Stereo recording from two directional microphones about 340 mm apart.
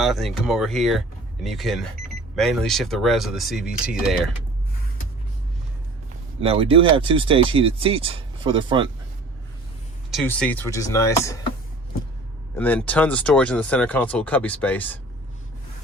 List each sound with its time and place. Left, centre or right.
0.0 s speech: centre
6.4 s speech: centre
10.1 s speech: centre
12.5 s speech: centre